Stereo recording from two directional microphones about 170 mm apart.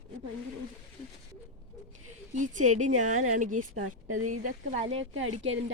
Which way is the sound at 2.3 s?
45° right (ahead or behind).